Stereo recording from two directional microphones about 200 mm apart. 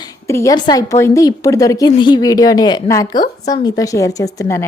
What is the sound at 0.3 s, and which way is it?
A woman's voice, 15° left (ahead or behind).